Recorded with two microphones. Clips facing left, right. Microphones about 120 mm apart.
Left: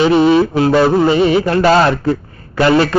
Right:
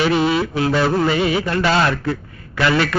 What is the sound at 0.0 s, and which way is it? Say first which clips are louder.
A man's voice: left 7 dB; 30° left (ahead or behind).